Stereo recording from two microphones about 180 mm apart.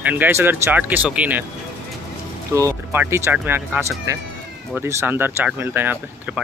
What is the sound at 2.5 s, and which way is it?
Speech, 15° right (ahead or behind).